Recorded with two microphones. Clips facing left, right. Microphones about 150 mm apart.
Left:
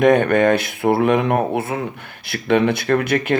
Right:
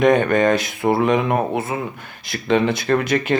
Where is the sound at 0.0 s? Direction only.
55° left (ahead or behind).